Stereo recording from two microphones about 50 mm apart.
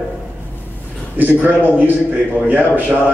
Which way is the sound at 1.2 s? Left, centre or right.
Right.